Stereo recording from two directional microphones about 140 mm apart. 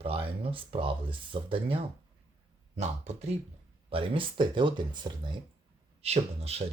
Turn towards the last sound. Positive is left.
turn(degrees=-45)  # may be behind; listen again after turning